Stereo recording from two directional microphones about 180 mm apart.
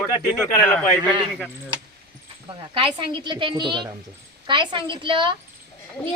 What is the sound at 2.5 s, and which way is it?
A woman's voice, 30° right (ahead or behind).